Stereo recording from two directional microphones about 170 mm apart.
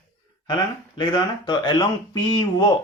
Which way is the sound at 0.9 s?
25° left (ahead or behind).